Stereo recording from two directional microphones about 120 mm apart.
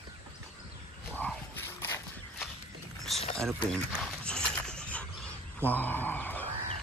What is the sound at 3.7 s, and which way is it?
Dog, 5° left (ahead or behind).